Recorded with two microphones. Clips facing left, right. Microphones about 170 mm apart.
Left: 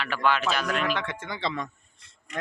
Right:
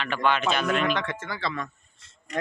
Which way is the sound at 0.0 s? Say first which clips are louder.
Right 1 dB; 5° left (ahead or behind).